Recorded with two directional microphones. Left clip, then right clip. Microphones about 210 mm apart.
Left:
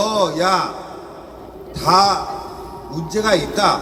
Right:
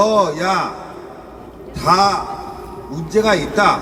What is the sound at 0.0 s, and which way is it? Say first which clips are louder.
Speech: right 2 dB; 15° left (ahead or behind).